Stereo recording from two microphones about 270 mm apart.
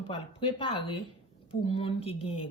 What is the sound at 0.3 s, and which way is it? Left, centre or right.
Speech, centre.